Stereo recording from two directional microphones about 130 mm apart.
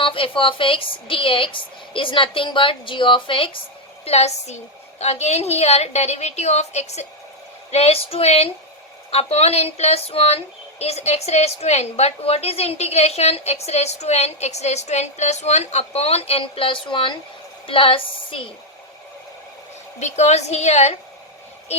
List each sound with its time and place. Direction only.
0.0 s a woman's voice: 40° left (ahead or behind)
4.0 s speech: 55° left (ahead or behind)
20.0 s speech: 60° left (ahead or behind)